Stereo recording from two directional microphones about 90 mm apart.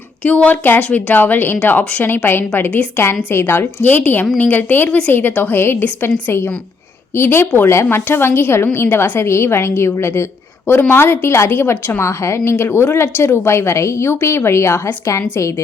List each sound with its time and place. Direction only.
0.2 s a woman's voice: 15° left (ahead or behind); by 15.6 s 35° left (ahead or behind)